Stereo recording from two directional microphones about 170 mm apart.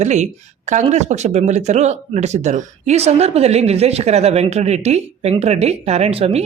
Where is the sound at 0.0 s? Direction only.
45° right (ahead or behind).